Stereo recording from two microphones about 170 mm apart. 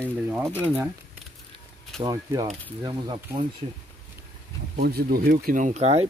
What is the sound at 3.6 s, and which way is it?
Speech, 35° right (ahead or behind).